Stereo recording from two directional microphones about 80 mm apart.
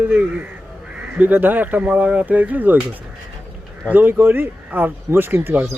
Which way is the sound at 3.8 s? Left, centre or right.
Right.